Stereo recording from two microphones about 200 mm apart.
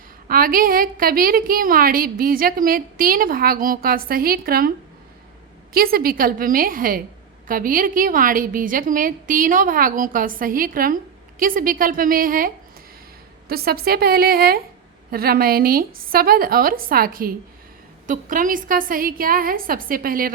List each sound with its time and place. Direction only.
0.3 s a woman's voice: 45° right (ahead or behind)
5.7 s a woman's voice: 50° right (ahead or behind)
13.5 s a woman's voice: 50° right (ahead or behind)